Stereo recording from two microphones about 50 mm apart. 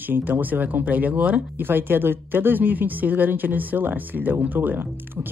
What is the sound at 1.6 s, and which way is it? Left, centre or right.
Speech, right.